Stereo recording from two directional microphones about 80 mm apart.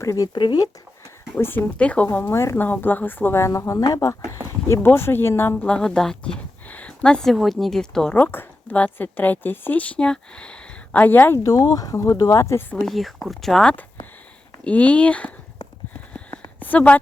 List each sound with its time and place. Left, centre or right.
0.0 s speech: left
0.3 s speech: left
1.4 s a woman's voice: left
2.3 s speech: left
2.6 s speech: left
4.7 s a woman's voice: left
5.6 s speech: centre
8.1 s a woman's voice: left
11.4 s speech: left
12.7 s speech: centre
13.7 s a sound: left
14.6 s speech: centre
16.1 s a sound: left